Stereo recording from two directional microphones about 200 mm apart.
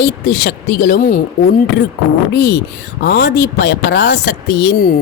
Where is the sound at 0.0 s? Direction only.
55° left (ahead or behind).